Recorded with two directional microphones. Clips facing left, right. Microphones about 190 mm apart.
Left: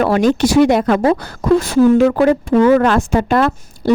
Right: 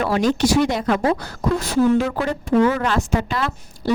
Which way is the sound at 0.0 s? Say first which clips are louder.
Left 5 dB; 60° left (ahead or behind).